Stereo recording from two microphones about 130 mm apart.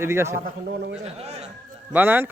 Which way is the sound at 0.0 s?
20° right (ahead or behind).